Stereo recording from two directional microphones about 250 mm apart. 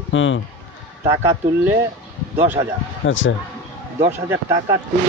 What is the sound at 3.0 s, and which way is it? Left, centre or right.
Speech, left.